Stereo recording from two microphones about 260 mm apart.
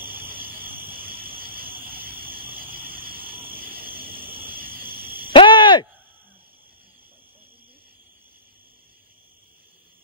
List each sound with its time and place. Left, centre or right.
0.0 s a sound: centre
4.5 s frog: centre
5.3 s owl: centre